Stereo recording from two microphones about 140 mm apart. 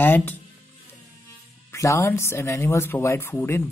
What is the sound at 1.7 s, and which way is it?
Speech, 20° left (ahead or behind).